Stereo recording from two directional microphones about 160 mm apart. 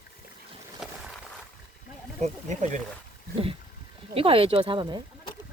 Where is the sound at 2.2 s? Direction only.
50° right (ahead or behind).